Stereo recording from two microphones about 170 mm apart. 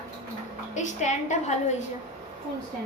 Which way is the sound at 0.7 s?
45° left (ahead or behind).